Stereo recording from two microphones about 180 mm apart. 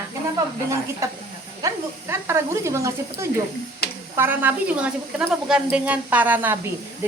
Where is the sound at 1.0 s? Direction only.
15° right (ahead or behind).